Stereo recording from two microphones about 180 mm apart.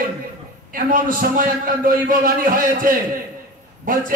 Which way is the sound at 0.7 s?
50° right (ahead or behind).